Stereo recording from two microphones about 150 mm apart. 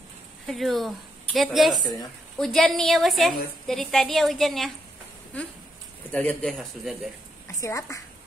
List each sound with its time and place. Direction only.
0.5 s a woman's voice: centre (ahead or behind)
6.1 s a woman's voice: 10° left (ahead or behind)
7.5 s a woman's voice: 20° left (ahead or behind)